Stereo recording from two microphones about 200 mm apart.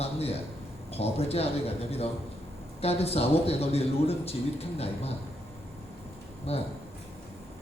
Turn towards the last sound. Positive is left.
turn(degrees=30)  # may be behind; listen again after turning